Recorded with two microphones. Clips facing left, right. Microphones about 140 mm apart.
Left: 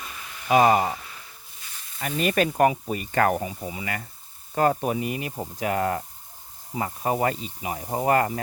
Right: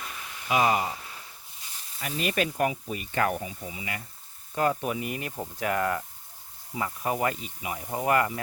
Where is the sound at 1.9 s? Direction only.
45° left (ahead or behind).